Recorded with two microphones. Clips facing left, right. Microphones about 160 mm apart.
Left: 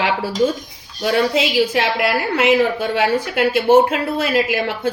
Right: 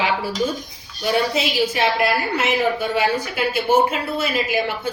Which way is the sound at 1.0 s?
90° left.